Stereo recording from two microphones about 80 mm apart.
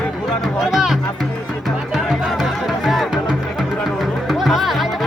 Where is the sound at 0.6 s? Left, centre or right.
Centre.